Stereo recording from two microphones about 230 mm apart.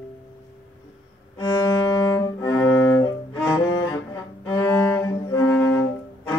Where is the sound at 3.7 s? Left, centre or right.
Left.